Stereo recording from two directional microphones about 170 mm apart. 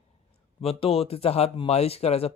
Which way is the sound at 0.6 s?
35° left (ahead or behind).